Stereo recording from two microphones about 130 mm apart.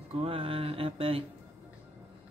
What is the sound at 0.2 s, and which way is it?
Mantra, 45° right (ahead or behind).